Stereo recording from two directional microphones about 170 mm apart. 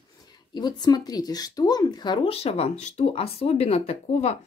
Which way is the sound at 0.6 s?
25° left (ahead or behind).